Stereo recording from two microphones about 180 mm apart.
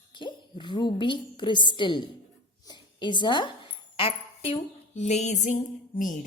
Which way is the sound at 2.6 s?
25° left (ahead or behind).